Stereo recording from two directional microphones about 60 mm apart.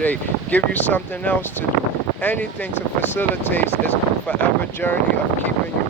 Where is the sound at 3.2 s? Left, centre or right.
Left.